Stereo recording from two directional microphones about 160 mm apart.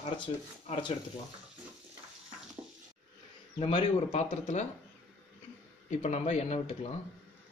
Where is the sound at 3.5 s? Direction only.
35° left (ahead or behind).